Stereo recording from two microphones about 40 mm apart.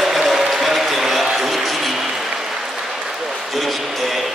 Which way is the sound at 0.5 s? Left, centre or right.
Centre.